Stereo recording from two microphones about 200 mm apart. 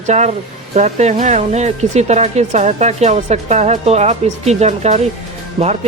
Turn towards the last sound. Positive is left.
turn(degrees=-35)  # may be behind; listen again after turning